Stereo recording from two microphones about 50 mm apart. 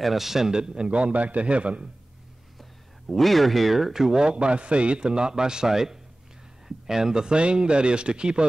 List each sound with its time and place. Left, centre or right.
0.0 s a man's voice: centre; by 1.9 s right
3.1 s a man's voice: centre